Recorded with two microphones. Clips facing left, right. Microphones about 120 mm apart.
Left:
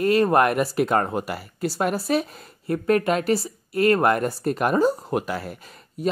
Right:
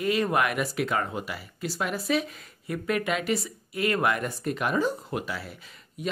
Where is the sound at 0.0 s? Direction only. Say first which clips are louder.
Left 7 dB; 40° left (ahead or behind).